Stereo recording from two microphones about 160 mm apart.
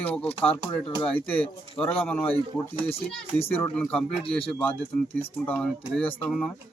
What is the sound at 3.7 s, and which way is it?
Speech, 5° left (ahead or behind).